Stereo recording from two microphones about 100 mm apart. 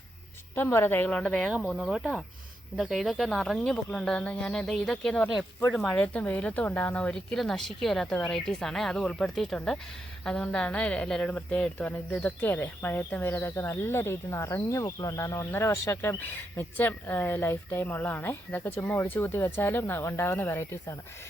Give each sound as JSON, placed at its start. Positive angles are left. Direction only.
{"t": 0.5, "sound": "speech", "side_deg": 20}
{"t": 1.7, "sound": "speech", "side_deg": 0}